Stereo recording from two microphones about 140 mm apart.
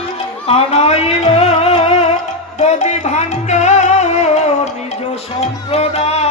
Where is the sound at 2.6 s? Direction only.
50° left (ahead or behind).